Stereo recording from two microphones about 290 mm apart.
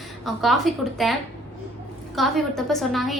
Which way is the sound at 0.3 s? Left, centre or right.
Centre.